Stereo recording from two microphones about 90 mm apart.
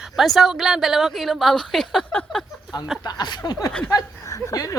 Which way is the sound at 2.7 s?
55° left (ahead or behind).